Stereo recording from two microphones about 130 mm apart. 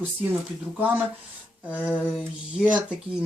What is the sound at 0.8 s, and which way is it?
Speech, 15° right (ahead or behind).